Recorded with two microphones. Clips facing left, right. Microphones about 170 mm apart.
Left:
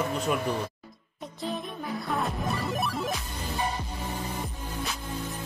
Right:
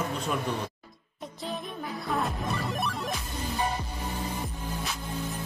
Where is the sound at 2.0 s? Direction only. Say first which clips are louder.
Even; centre (ahead or behind).